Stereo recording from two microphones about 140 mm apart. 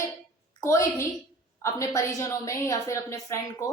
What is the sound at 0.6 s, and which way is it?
A woman's voice, 20° left (ahead or behind).